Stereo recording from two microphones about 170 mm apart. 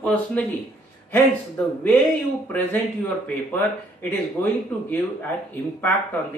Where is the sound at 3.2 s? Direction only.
10° left (ahead or behind).